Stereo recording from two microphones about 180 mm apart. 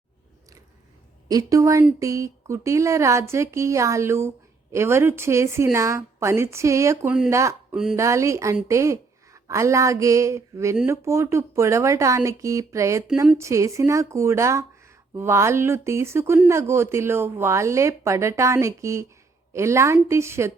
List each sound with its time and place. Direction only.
1.3 s speech: 20° right (ahead or behind)